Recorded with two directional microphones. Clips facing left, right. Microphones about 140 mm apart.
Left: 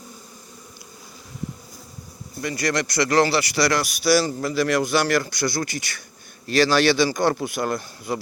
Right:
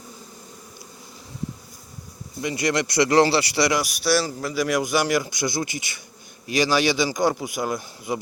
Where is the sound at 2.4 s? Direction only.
20° right (ahead or behind).